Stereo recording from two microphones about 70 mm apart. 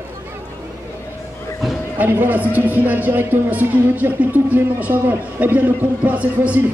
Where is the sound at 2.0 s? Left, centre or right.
Right.